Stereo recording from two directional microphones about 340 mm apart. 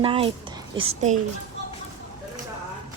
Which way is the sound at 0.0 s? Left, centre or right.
Centre.